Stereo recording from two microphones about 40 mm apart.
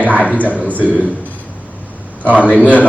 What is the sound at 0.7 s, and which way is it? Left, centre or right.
Speech, right.